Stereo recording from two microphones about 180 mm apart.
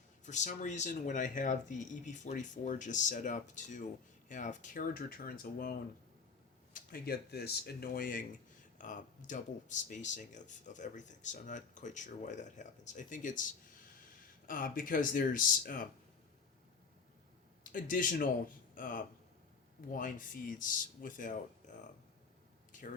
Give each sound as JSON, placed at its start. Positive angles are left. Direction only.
{"t": 0.3, "sound": "speech", "side_deg": 45}
{"t": 6.7, "sound": "speech", "side_deg": 55}
{"t": 14.4, "sound": "speech", "side_deg": 50}
{"t": 17.6, "sound": "speech", "side_deg": 50}